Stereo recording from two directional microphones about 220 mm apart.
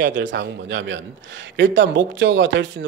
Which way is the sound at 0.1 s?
55° right (ahead or behind).